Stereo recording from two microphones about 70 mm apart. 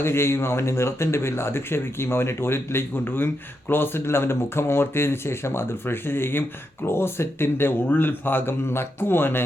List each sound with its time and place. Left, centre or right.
0.0 s speech: left